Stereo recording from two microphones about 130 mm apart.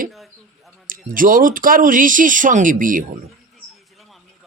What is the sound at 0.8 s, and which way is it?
Speech, 90° right.